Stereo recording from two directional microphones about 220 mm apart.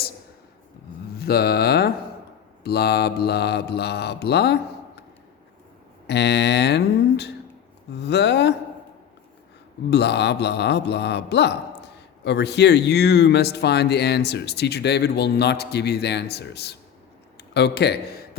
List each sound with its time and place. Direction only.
1.1 s a sound: 45° left (ahead or behind)
2.6 s speech: 45° left (ahead or behind)
6.1 s speech: 50° left (ahead or behind)
9.9 s speech: 50° left (ahead or behind)